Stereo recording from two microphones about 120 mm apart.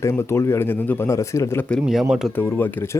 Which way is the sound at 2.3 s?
15° left (ahead or behind).